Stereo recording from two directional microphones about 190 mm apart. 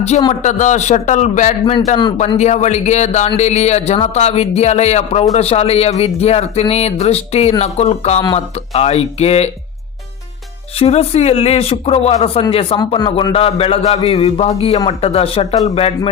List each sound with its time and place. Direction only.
0.4 s speech: 40° left (ahead or behind)
10.8 s speech: 30° left (ahead or behind)